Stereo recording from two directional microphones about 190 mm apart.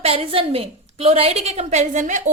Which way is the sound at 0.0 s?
30° right (ahead or behind).